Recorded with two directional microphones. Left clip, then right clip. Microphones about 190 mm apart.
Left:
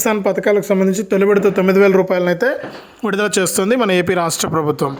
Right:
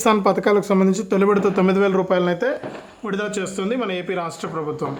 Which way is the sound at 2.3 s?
35° left (ahead or behind).